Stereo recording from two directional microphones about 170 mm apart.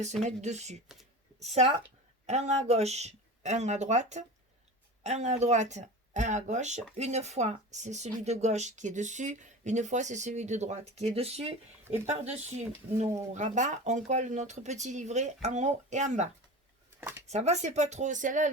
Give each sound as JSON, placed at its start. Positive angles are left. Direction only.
{"t": 0.3, "sound": "a woman's voice", "side_deg": -40}
{"t": 17.0, "sound": "a sound", "side_deg": -15}
{"t": 17.2, "sound": "speech", "side_deg": -40}